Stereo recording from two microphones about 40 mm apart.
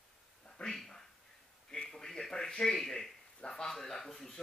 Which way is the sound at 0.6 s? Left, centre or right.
Left.